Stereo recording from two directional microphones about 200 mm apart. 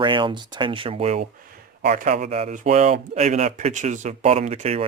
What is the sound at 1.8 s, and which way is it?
Speech, 45° right (ahead or behind).